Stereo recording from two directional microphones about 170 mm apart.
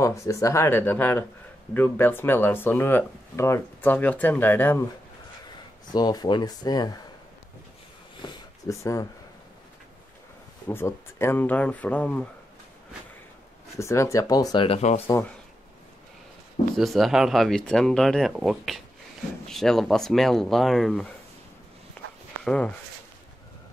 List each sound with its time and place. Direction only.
0.0 s speech: 15° left (ahead or behind)
5.9 s speech: 25° left (ahead or behind)
8.2 s a sound: 20° left (ahead or behind)
10.7 s speech: 15° left (ahead or behind)
13.7 s speech: 15° left (ahead or behind)
15.1 s speech: 15° left (ahead or behind)
16.7 s speech: centre (ahead or behind)
22.4 s speech: 5° left (ahead or behind)